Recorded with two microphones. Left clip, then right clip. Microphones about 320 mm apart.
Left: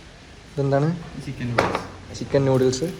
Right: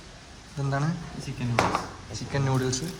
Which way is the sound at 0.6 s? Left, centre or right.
Centre.